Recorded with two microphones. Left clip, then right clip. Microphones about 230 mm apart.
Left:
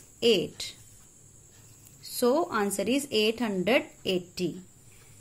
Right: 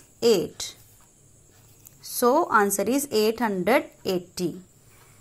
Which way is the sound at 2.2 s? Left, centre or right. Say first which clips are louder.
Right 6 dB; centre.